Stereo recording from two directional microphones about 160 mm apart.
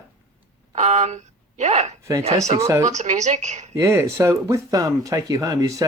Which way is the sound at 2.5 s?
20° right (ahead or behind).